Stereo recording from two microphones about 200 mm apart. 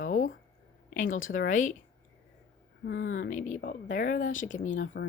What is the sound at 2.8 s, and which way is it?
Speech, 70° left (ahead or behind).